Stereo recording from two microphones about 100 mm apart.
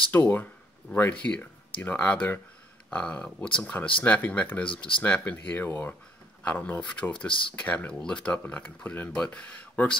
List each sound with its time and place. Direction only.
0.1 s speech: 20° left (ahead or behind)